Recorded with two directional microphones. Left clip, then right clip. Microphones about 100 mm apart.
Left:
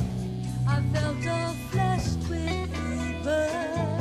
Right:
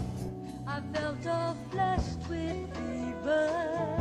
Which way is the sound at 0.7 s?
50° left (ahead or behind).